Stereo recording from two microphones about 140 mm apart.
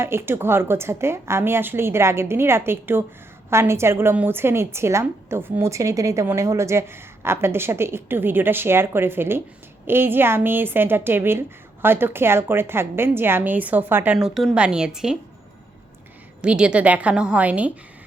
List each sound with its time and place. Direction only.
0.0 s a woman's voice: 15° right (ahead or behind)
16.4 s a woman's voice: 5° right (ahead or behind)